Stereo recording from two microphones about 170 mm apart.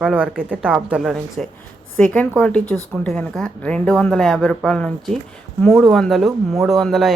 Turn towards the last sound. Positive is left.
turn(degrees=0)  # may be behind; listen again after turning